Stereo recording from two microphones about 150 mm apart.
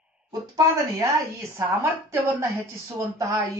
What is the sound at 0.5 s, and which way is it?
A woman's voice, 20° right (ahead or behind).